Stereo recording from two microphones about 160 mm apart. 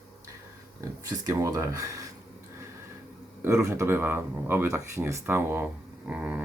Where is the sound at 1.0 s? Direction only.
20° right (ahead or behind).